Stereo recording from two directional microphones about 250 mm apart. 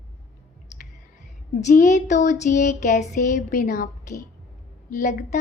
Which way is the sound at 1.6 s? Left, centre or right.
Left.